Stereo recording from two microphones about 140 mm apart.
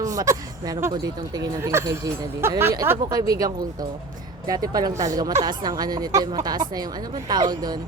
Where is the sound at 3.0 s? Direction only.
30° right (ahead or behind).